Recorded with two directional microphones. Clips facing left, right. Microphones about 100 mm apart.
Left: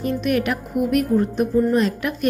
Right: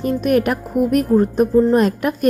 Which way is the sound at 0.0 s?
40° right (ahead or behind).